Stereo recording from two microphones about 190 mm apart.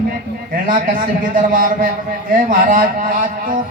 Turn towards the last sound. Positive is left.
turn(degrees=-45)  # may be behind; listen again after turning